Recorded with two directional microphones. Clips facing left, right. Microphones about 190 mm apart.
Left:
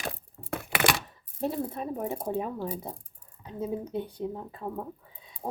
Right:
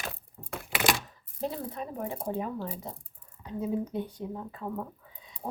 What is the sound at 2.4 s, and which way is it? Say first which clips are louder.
Speech: left 2 dB; 20° left (ahead or behind).